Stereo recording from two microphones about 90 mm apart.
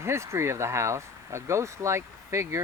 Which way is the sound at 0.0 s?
30° right (ahead or behind).